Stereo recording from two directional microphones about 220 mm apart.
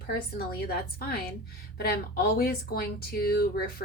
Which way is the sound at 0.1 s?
45° left (ahead or behind).